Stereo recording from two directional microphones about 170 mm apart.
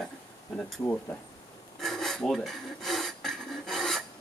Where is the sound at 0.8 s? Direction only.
15° left (ahead or behind).